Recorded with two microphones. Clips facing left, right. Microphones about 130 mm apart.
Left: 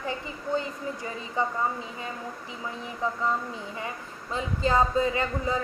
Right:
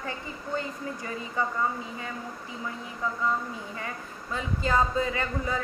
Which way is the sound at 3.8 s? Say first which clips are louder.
Left 1 dB; 20° left (ahead or behind).